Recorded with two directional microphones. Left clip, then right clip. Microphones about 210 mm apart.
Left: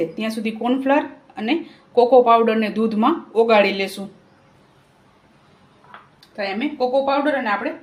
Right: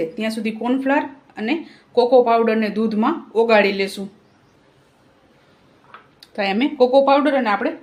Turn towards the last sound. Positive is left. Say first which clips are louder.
# right 3 dB
turn(degrees=-55)  # may be behind; listen again after turning